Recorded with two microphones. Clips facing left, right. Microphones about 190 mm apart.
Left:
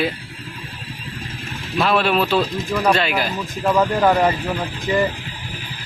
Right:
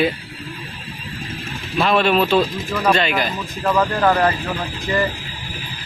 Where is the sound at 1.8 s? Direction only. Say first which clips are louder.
Right 2 dB; 5° left (ahead or behind).